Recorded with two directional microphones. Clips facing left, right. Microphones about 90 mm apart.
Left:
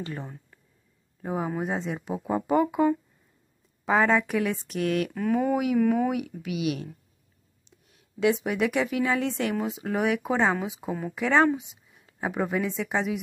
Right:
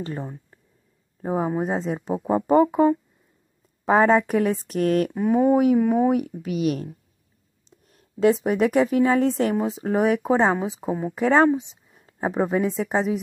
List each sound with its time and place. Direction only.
0.0 s a woman's voice: 35° right (ahead or behind)
5.1 s mantra: 20° right (ahead or behind)
6.1 s a woman's voice: 40° right (ahead or behind)
7.9 s a woman's voice: 40° right (ahead or behind)